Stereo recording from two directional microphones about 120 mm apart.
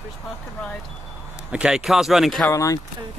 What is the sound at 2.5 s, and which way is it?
Speech, 25° left (ahead or behind).